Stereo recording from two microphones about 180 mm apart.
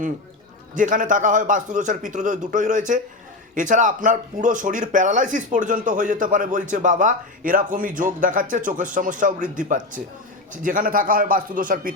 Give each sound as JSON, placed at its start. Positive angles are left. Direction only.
{"t": 0.7, "sound": "speech", "side_deg": -45}